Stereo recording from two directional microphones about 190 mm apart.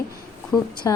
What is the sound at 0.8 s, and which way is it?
Speech, 20° left (ahead or behind).